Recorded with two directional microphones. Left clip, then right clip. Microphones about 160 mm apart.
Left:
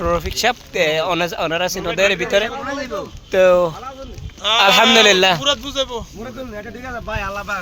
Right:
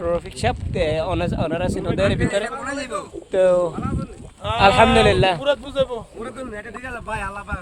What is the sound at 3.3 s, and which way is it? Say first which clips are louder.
Speech: left 4 dB; 35° left (ahead or behind).